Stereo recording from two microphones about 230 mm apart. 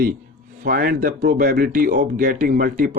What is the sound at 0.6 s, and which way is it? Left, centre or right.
A man's voice, right.